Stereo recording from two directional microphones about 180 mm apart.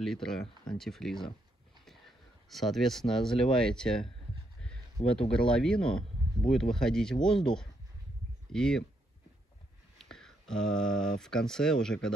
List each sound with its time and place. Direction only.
0.0 s speech: centre (ahead or behind)
5.0 s speech: 30° left (ahead or behind)
5.5 s speech: 5° left (ahead or behind)
9.9 s speech: 5° left (ahead or behind)